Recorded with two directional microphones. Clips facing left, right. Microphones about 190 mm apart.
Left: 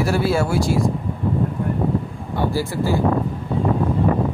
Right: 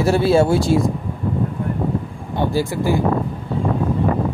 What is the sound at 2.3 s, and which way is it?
Speech, 20° right (ahead or behind).